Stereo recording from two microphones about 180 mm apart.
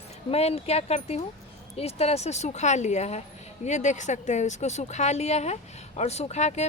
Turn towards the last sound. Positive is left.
turn(degrees=40)  # may be behind; listen again after turning